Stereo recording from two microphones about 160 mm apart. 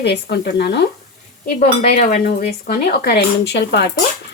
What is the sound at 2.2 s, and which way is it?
Speech, 85° left.